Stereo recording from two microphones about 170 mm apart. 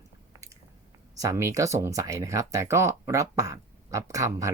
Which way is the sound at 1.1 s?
20° right (ahead or behind).